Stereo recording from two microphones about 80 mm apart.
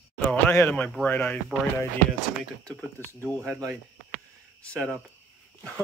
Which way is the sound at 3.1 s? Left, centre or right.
Left.